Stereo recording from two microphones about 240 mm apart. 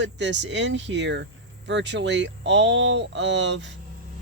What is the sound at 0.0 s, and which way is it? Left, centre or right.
Speech, right.